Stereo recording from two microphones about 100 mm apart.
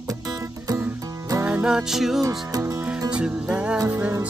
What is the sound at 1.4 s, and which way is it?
Music, 10° right (ahead or behind).